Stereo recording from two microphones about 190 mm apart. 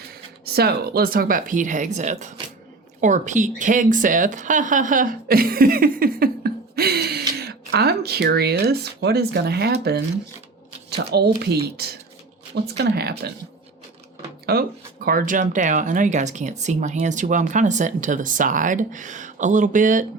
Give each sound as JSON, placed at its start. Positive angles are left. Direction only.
{"t": 0.4, "sound": "speech", "side_deg": -55}
{"t": 14.5, "sound": "speech", "side_deg": -55}
{"t": 15.0, "sound": "speech", "side_deg": -45}